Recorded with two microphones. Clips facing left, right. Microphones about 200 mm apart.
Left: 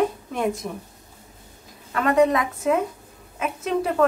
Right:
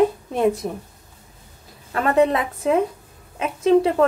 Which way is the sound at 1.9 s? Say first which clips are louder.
Right 1 dB; 30° right (ahead or behind).